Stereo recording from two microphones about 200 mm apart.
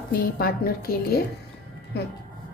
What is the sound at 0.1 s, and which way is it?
A woman's voice, 50° left (ahead or behind).